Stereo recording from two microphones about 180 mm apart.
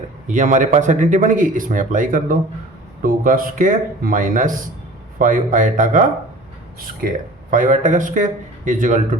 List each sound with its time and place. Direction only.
0.3 s speech: 45° right (ahead or behind)